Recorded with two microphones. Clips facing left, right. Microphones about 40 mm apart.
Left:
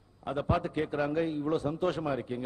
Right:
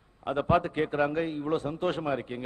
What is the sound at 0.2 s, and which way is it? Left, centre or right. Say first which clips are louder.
A man's voice: right 5 dB; right.